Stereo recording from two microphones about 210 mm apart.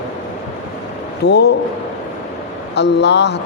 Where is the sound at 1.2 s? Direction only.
55° left (ahead or behind).